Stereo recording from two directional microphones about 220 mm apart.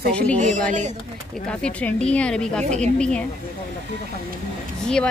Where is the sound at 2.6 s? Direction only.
30° right (ahead or behind).